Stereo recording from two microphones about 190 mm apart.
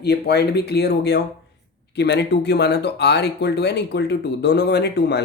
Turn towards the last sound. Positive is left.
turn(degrees=60)  # may be behind; listen again after turning